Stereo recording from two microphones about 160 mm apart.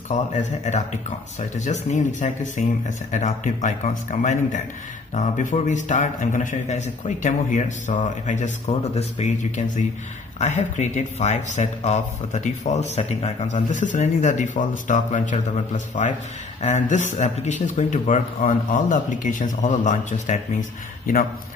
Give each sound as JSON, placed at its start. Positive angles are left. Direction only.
{"t": 0.1, "sound": "speech", "side_deg": 50}